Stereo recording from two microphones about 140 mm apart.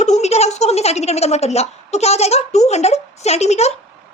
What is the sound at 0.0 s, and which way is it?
A woman's voice, 55° left (ahead or behind).